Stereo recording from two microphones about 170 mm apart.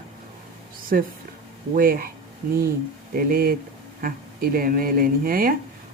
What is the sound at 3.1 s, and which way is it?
A woman's voice, 60° right (ahead or behind).